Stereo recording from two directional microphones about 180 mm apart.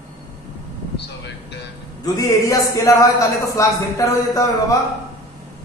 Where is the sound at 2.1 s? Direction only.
20° left (ahead or behind).